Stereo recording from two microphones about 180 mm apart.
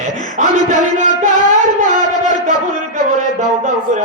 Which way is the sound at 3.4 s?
40° right (ahead or behind).